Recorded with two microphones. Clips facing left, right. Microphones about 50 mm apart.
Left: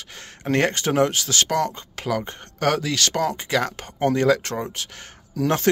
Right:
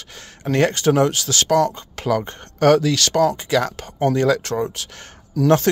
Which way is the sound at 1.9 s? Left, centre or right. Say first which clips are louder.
Right 4 dB; centre.